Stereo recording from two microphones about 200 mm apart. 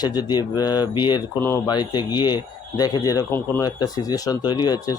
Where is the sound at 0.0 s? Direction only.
20° left (ahead or behind).